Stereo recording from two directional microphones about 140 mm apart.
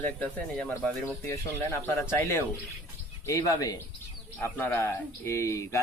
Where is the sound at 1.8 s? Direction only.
15° left (ahead or behind).